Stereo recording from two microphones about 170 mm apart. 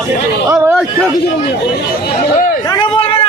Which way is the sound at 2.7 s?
25° left (ahead or behind).